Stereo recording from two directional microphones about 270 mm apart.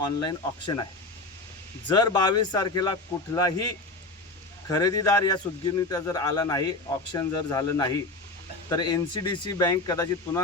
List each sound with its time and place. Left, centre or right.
0.2 s a man's voice: centre
1.9 s a man's voice: centre
4.7 s a man's voice: centre